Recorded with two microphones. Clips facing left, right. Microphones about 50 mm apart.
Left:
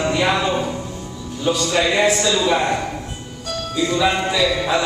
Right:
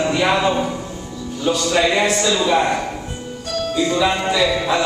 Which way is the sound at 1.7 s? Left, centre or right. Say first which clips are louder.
Even; centre.